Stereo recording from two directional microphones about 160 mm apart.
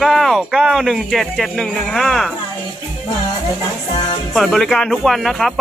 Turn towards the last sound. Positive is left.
turn(degrees=0)  # may be behind; listen again after turning